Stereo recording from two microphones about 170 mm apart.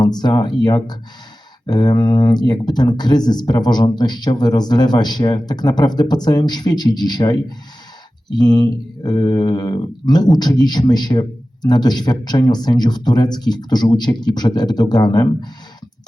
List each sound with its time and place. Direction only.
0.0 s mantra: 25° left (ahead or behind)